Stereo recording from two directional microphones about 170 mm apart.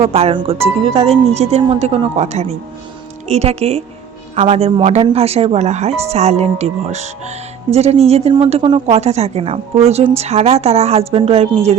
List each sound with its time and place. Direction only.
0.0 s speech: 35° right (ahead or behind)